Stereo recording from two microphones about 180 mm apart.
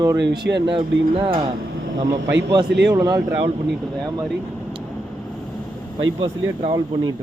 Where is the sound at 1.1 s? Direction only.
30° right (ahead or behind).